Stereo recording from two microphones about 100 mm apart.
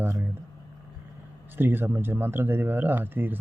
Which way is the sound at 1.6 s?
20° right (ahead or behind).